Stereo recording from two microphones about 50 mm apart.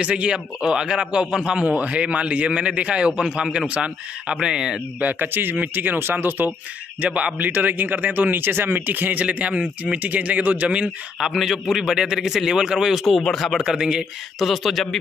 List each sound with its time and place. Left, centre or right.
0.0 s a man's voice: right
5.0 s a man's voice: right
7.1 s a man's voice: centre
7.3 s a man's voice: right
11.1 s a man's voice: centre
13.3 s speech: centre
13.6 s a man's voice: centre
14.4 s speech: centre